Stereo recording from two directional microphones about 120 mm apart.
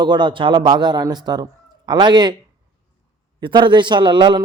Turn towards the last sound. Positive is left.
turn(degrees=-40)  # may be behind; listen again after turning